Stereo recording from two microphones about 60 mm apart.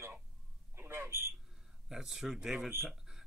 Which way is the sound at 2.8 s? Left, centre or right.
Centre.